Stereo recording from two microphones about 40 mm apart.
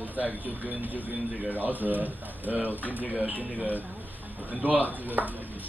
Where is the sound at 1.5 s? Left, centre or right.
Right.